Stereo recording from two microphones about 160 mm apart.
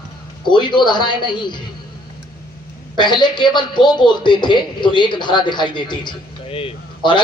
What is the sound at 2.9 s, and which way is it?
A man's voice, 30° left (ahead or behind).